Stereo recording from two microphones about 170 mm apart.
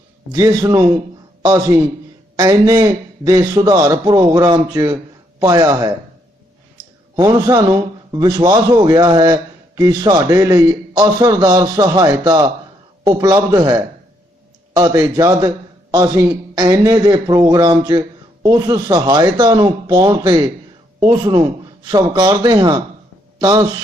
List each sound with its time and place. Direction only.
0.3 s a man's voice: 20° right (ahead or behind)
7.2 s a man's voice: 20° right (ahead or behind)